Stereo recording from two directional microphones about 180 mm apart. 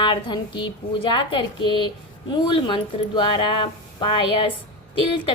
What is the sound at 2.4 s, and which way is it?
A woman's voice, 25° left (ahead or behind).